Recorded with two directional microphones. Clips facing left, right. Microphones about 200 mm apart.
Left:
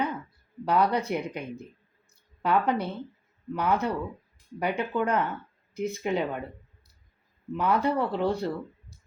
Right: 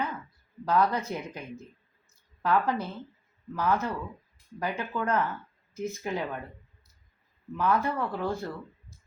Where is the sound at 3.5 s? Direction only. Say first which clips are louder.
Left 2 dB; 15° left (ahead or behind).